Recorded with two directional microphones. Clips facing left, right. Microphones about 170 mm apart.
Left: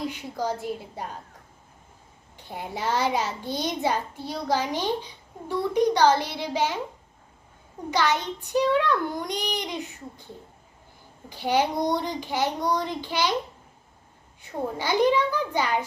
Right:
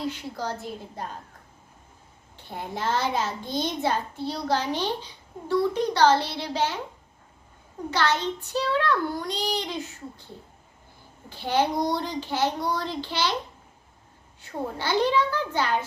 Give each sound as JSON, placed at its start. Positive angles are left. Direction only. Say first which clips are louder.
{"t": 0.1, "sound": "a child's voice", "louder": "left 3 dB", "side_deg": 15}
{"t": 2.3, "sound": "a child's voice", "louder": "even", "side_deg": 15}
{"t": 7.9, "sound": "a child's voice", "louder": "even", "side_deg": 15}
{"t": 11.3, "sound": "a child's voice", "louder": "left 1 dB", "side_deg": 15}
{"t": 14.4, "sound": "a child's voice", "louder": "left 1 dB", "side_deg": 15}